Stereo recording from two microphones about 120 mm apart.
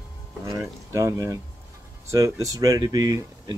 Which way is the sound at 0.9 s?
30° right (ahead or behind).